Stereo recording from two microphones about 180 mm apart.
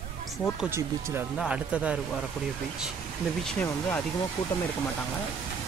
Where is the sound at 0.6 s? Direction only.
15° right (ahead or behind).